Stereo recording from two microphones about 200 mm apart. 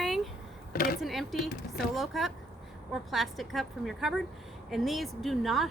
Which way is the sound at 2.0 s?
Centre (ahead or behind).